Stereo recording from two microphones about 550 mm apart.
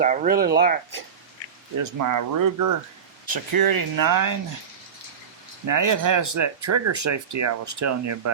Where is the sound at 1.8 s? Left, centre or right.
Right.